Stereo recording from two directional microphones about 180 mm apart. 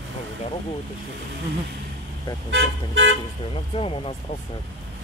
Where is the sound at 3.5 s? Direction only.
30° left (ahead or behind).